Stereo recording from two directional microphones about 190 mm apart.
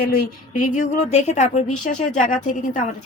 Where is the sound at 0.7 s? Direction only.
40° left (ahead or behind).